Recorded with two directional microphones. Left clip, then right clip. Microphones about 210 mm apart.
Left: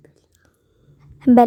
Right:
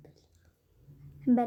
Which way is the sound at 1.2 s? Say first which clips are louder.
Left 12 dB; 50° left (ahead or behind).